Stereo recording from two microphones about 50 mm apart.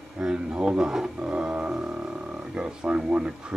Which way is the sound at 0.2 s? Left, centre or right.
Centre.